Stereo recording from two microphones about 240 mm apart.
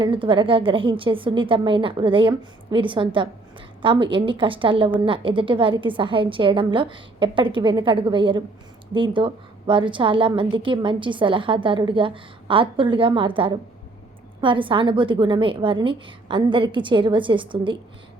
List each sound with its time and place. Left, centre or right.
0.0 s a woman's voice: right